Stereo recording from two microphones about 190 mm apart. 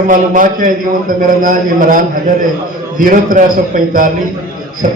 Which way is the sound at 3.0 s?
45° right (ahead or behind).